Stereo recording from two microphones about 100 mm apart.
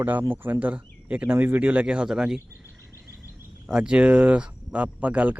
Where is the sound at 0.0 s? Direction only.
20° right (ahead or behind).